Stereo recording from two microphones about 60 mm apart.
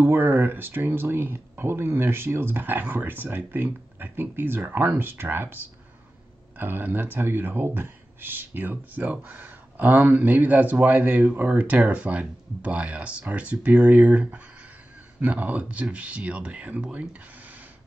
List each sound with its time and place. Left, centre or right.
0.0 s speech: right
6.6 s speech: right